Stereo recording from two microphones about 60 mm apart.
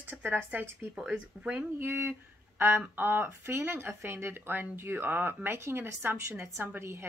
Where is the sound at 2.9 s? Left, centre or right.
Right.